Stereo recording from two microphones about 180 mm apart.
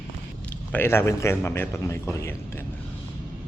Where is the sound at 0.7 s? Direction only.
10° left (ahead or behind).